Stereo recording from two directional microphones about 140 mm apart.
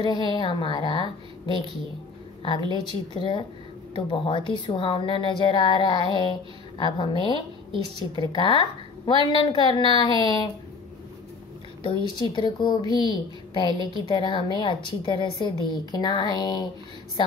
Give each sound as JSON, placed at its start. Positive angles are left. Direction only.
{"t": 0.0, "sound": "speech", "side_deg": 30}
{"t": 2.7, "sound": "speech", "side_deg": 35}
{"t": 11.8, "sound": "speech", "side_deg": 35}